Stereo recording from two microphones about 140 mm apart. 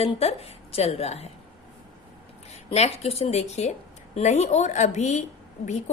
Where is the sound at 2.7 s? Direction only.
50° left (ahead or behind).